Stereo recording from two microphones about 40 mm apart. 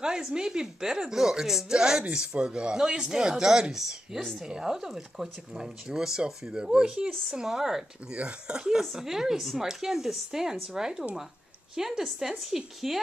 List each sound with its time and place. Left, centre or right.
0.0 s speech: centre
7.4 s speech: centre
8.1 s speech: right; by 13.0 s centre